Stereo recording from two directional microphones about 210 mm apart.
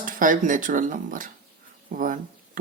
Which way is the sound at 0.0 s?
40° right (ahead or behind).